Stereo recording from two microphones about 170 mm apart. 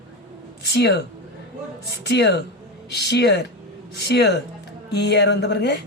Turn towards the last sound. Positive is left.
turn(degrees=80)